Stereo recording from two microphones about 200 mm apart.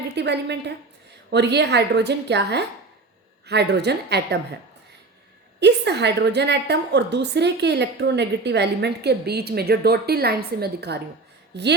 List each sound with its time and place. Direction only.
0.2 s a woman's voice: 60° right (ahead or behind)
5.5 s a woman's voice: 60° right (ahead or behind)